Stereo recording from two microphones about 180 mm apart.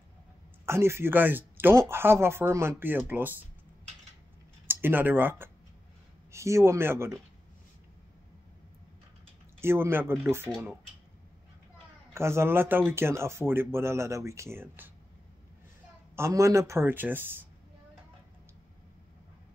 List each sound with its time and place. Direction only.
0.7 s speech: 15° right (ahead or behind)
4.6 s speech: 10° right (ahead or behind)
9.6 s speech: 15° right (ahead or behind)
12.1 s speech: 15° right (ahead or behind)
16.2 s speech: 15° right (ahead or behind)